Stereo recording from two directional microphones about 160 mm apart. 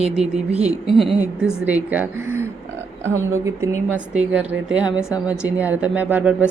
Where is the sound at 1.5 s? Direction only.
10° right (ahead or behind).